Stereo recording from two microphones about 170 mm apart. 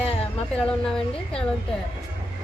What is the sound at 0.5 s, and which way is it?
Speech, 5° left (ahead or behind).